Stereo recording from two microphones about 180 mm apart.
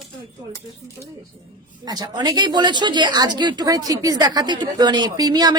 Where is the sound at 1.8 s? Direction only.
20° right (ahead or behind).